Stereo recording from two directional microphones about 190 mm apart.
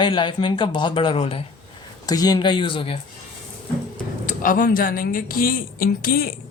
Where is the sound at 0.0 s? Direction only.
25° left (ahead or behind).